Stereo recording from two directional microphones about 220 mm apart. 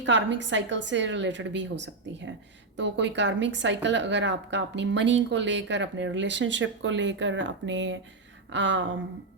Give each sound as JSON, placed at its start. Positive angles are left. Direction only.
{"t": 0.0, "sound": "a woman's voice", "side_deg": -55}